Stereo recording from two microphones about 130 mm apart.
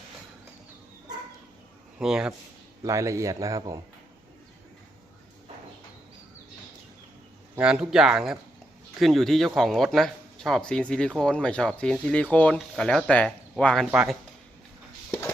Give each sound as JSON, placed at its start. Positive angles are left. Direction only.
{"t": 2.0, "sound": "speech", "side_deg": -5}
{"t": 2.8, "sound": "a man's voice", "side_deg": -25}
{"t": 7.5, "sound": "speech", "side_deg": -5}
{"t": 13.8, "sound": "speech", "side_deg": -10}